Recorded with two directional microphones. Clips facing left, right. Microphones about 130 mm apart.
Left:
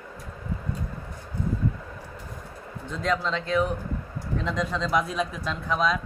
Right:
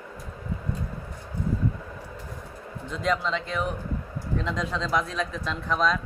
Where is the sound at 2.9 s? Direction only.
Centre (ahead or behind).